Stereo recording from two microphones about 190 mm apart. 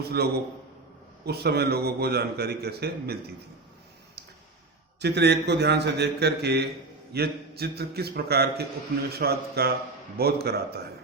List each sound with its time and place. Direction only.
0.0 s a man's voice: 55° right (ahead or behind)
4.9 s a man's voice: 60° right (ahead or behind)